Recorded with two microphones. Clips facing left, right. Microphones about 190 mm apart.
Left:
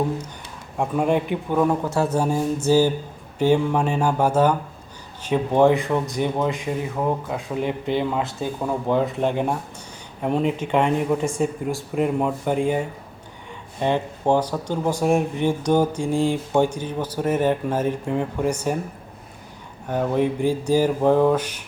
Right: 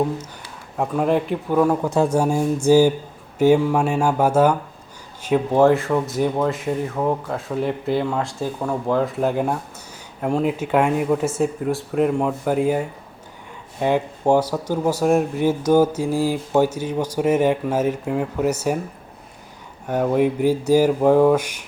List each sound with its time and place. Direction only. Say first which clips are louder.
0.8 s speech: right 1 dB; centre (ahead or behind)
1.8 s speech: right 3 dB; 15° right (ahead or behind)
19.9 s speech: right 3 dB; 10° right (ahead or behind)